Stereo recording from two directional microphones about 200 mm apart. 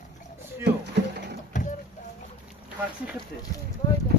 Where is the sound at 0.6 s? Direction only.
60° right (ahead or behind).